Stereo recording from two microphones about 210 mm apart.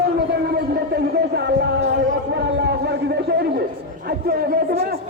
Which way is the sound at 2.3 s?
55° right (ahead or behind).